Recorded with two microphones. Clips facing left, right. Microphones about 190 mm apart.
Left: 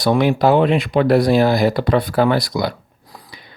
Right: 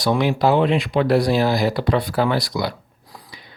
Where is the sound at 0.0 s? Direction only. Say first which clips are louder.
Left 3 dB; 55° left (ahead or behind).